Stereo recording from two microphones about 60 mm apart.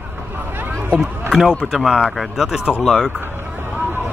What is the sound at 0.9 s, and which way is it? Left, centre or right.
Speech, centre.